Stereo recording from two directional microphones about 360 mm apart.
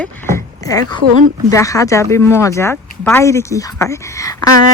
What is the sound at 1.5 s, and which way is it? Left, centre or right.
Speech, centre.